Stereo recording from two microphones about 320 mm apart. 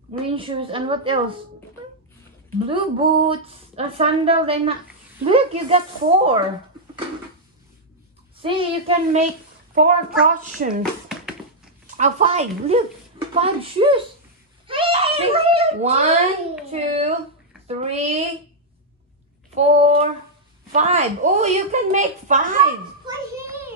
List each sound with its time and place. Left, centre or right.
0.3 s speech: centre
2.7 s speech: centre
8.4 s a woman's voice: centre
10.8 s a sound: centre
12.0 s a woman's voice: right
14.7 s a sound: centre
17.6 s a woman's voice: centre
19.5 s a woman's voice: centre
23.0 s a sound: centre